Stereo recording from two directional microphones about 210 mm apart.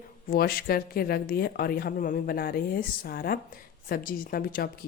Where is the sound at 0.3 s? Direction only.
45° left (ahead or behind).